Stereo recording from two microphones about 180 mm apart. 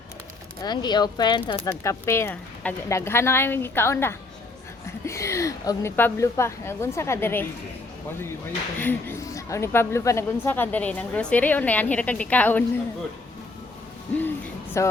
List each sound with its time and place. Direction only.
0.6 s speech: 25° left (ahead or behind)
8.8 s speech: 10° left (ahead or behind)
14.2 s hoot: 10° left (ahead or behind)